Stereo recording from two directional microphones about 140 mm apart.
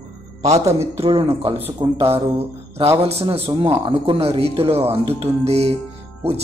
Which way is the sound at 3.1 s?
45° right (ahead or behind).